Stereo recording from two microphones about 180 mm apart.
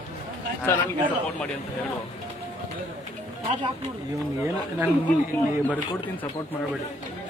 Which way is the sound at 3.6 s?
20° right (ahead or behind).